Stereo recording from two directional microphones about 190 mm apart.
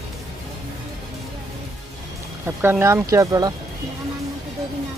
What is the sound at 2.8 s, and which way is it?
Speech, 15° right (ahead or behind).